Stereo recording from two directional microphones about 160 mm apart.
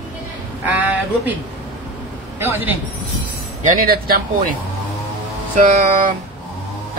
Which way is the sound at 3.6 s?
60° right (ahead or behind).